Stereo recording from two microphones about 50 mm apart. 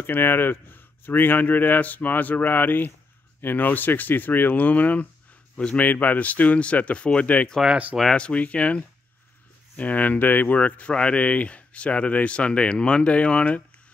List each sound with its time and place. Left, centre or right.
0.0 s speech: left
7.7 s speech: right
8.1 s speech: left
10.9 s speech: left